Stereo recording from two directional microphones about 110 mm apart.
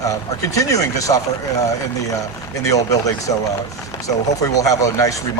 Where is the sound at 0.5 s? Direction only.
30° left (ahead or behind).